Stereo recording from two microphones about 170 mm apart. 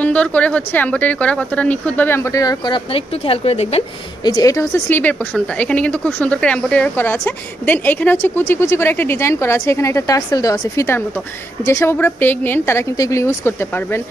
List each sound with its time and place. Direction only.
0.0 s a woman's voice: 10° left (ahead or behind); by 3.8 s 35° left (ahead or behind)
4.2 s a woman's voice: 25° left (ahead or behind)